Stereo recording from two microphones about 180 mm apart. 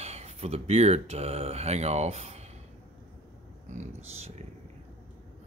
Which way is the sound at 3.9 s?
35° right (ahead or behind).